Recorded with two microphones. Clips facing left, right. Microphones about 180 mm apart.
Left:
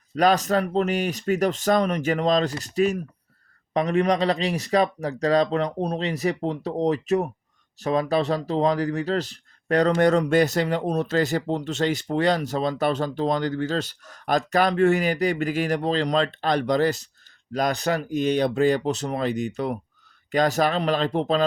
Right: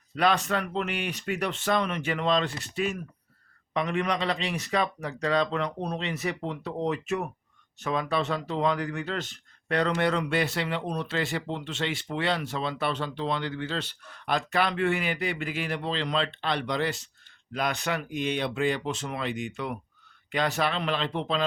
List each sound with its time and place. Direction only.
0.2 s speech: 40° left (ahead or behind)